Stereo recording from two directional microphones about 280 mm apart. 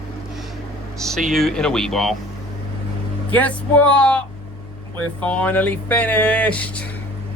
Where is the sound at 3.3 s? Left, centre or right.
Centre.